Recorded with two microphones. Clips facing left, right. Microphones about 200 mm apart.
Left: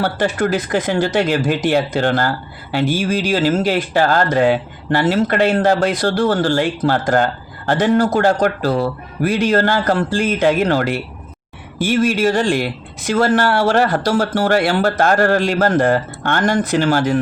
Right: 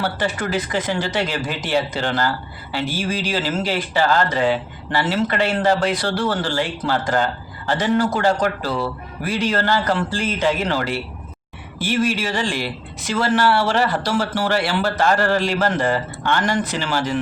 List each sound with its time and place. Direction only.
0.0 s speech: 45° left (ahead or behind)